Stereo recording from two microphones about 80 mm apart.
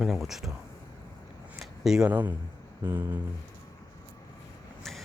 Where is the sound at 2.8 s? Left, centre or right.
Right.